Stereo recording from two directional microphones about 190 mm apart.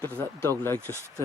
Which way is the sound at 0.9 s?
20° left (ahead or behind).